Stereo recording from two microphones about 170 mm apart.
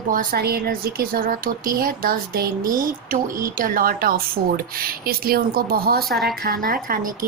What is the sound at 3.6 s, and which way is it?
Speech, 55° right (ahead or behind).